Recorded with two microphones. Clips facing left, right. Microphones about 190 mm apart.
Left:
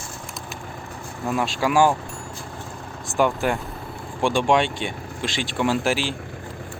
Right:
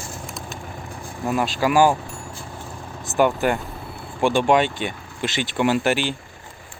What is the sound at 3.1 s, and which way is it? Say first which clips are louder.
Speech: right 2 dB; centre (ahead or behind).